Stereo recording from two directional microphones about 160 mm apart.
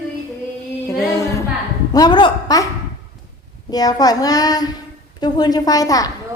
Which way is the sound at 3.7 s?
25° left (ahead or behind).